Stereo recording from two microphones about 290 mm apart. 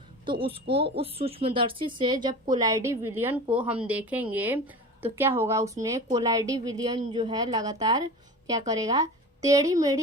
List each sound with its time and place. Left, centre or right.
0.3 s a woman's voice: centre